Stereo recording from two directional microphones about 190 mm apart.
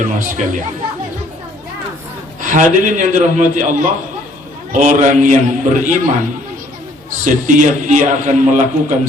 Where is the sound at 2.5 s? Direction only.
40° right (ahead or behind).